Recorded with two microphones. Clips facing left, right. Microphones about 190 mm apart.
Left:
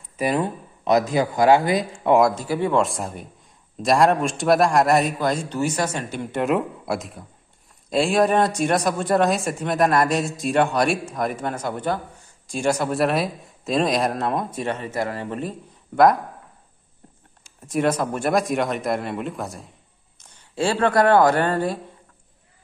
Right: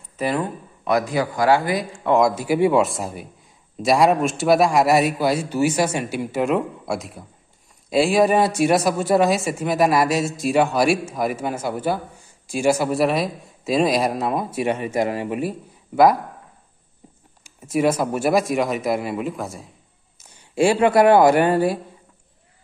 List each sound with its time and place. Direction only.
0.2 s speech: 20° left (ahead or behind)
2.3 s a man's voice: 10° right (ahead or behind)
17.4 s speech: 5° right (ahead or behind)
20.2 s speech: 10° right (ahead or behind)